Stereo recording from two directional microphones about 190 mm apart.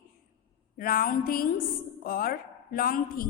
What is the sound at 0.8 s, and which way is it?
A woman's voice, 50° left (ahead or behind).